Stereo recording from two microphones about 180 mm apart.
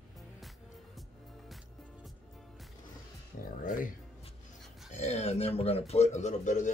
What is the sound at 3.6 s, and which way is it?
A man's voice, 50° left (ahead or behind).